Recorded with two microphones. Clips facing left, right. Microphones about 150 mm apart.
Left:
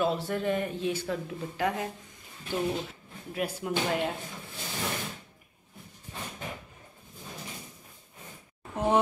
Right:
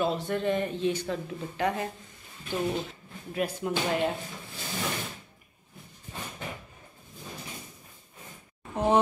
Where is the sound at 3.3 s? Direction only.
5° left (ahead or behind).